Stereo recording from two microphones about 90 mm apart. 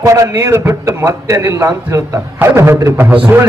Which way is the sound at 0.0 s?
35° right (ahead or behind).